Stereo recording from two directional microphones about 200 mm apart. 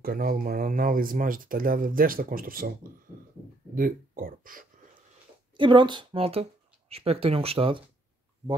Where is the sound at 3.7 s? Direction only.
45° right (ahead or behind).